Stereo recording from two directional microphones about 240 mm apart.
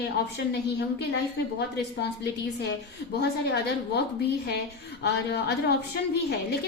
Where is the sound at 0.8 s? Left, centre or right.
Left.